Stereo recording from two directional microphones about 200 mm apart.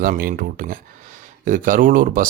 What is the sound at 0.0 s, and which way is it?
Speech, 45° right (ahead or behind).